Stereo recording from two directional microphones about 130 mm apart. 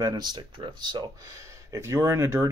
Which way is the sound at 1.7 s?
20° right (ahead or behind).